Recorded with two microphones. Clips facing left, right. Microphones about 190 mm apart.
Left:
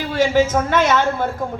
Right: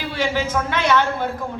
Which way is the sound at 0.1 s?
45° left (ahead or behind).